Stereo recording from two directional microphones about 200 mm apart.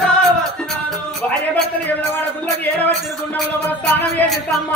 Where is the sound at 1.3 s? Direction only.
10° left (ahead or behind).